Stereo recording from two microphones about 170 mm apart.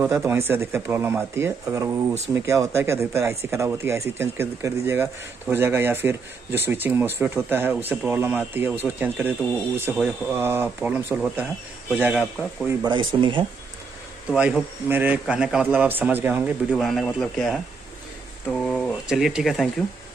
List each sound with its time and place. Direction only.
0.0 s speech: 15° right (ahead or behind)
12.8 s speech: 30° right (ahead or behind)
14.3 s speech: 5° right (ahead or behind)
16.7 s speech: centre (ahead or behind)